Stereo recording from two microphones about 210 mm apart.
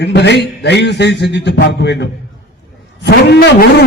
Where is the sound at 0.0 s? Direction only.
55° left (ahead or behind).